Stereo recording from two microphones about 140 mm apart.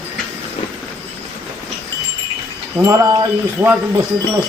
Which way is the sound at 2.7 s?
20° right (ahead or behind).